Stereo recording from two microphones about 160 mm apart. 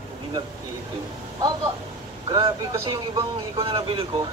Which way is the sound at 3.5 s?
35° right (ahead or behind).